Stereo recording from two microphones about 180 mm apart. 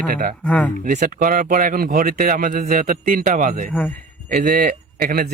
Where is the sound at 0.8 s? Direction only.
50° right (ahead or behind).